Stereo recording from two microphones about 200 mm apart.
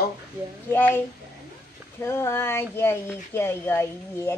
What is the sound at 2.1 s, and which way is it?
Speech, 10° left (ahead or behind).